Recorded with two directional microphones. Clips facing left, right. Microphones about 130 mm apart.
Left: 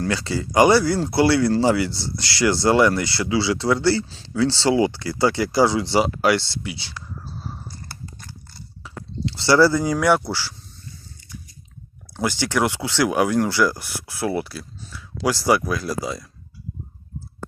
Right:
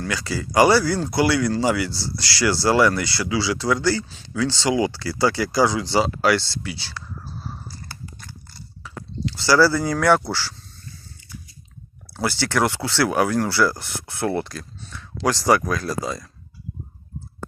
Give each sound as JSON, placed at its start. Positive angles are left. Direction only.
{"t": 0.0, "sound": "speech", "side_deg": 30}
{"t": 7.4, "sound": "a sound", "side_deg": 15}
{"t": 8.8, "sound": "speech", "side_deg": 25}
{"t": 12.1, "sound": "speech", "side_deg": 15}